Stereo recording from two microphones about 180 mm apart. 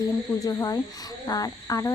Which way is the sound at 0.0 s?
20° left (ahead or behind).